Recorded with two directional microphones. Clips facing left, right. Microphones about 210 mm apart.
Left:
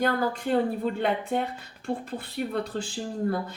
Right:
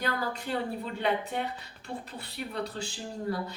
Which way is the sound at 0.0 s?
50° left (ahead or behind).